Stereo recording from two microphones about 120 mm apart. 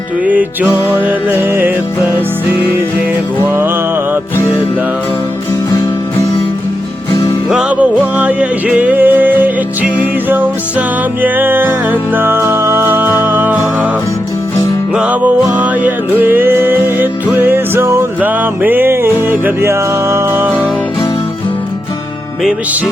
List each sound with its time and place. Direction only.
0.3 s music: 15° right (ahead or behind)
3.5 s music: 20° right (ahead or behind)
7.5 s music: 10° right (ahead or behind)
14.9 s music: 10° right (ahead or behind)